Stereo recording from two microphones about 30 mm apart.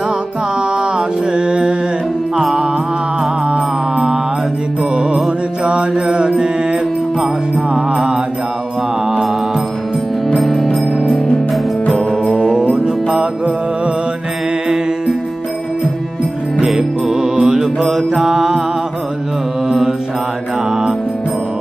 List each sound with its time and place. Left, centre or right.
0.9 s music: right
5.7 s mantra: right
6.3 s music: right
10.5 s music: centre
12.8 s music: right
16.6 s music: centre
17.8 s mantra: centre